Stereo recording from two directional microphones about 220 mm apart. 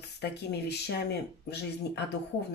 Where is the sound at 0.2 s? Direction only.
50° left (ahead or behind).